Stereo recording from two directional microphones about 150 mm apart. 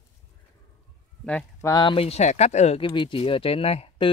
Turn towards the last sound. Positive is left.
turn(degrees=40)  # may be behind; listen again after turning